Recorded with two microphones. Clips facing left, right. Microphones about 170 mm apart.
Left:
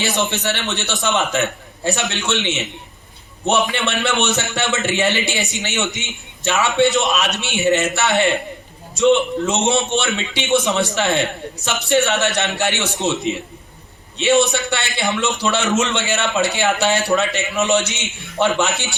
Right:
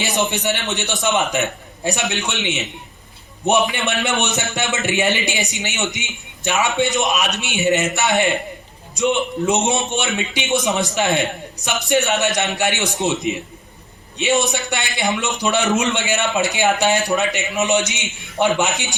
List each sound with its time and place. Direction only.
0.0 s a man's voice: 15° right (ahead or behind)
3.7 s a man's voice: 15° right (ahead or behind)